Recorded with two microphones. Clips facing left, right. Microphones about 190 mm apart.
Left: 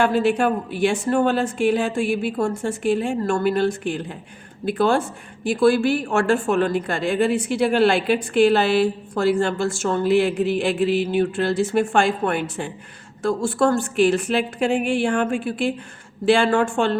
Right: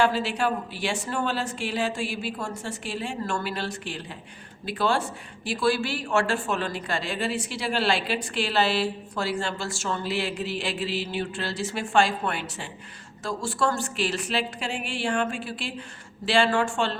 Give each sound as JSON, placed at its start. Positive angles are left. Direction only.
{"t": 0.0, "sound": "a woman's voice", "side_deg": 55}